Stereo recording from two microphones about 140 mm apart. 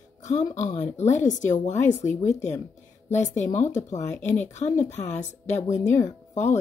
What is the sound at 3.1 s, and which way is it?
A woman's voice, 55° left (ahead or behind).